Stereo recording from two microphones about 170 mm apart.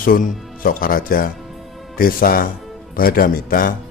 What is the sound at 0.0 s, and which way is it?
A man's voice, 55° left (ahead or behind).